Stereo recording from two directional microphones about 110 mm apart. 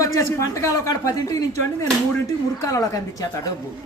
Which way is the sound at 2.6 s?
30° left (ahead or behind).